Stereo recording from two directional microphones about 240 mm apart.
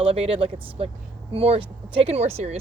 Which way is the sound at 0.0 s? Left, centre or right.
Right.